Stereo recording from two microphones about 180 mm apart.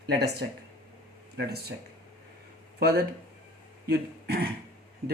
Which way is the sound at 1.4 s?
60° right (ahead or behind).